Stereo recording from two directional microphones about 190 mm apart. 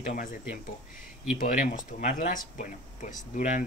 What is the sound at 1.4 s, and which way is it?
Speech, 40° left (ahead or behind).